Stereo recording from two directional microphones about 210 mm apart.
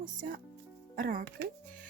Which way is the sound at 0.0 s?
35° right (ahead or behind).